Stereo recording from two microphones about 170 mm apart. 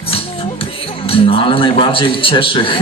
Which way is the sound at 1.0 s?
35° left (ahead or behind).